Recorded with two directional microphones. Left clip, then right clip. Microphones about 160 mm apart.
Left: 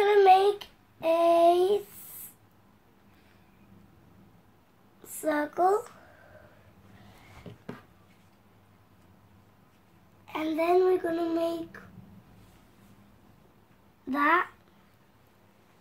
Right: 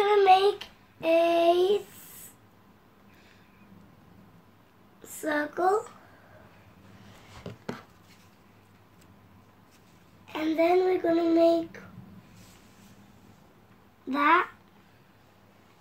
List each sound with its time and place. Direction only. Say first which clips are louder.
0.0 s child singing: even; 45° left (ahead or behind)
5.1 s child singing: left 1 dB; 35° left (ahead or behind)
7.5 s a sound: right 7 dB; 85° right
10.2 s child singing: right 3 dB; 35° left (ahead or behind)
14.1 s a child's voice: right 2 dB; 30° left (ahead or behind)